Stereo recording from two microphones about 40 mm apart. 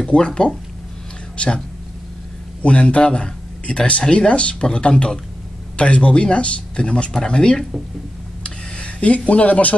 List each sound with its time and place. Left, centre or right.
0.1 s speech: left
2.6 s speech: left
8.5 s a sound: left